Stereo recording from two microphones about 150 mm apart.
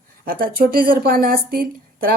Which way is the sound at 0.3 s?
75° right (ahead or behind).